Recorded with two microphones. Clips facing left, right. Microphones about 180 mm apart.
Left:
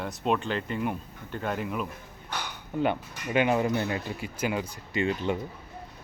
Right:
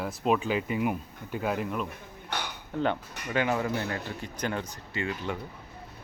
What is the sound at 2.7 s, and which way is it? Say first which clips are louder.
Speech: left 2 dB; 10° left (ahead or behind).